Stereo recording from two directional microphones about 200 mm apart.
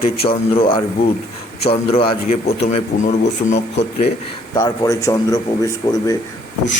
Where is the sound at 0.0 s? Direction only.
30° left (ahead or behind).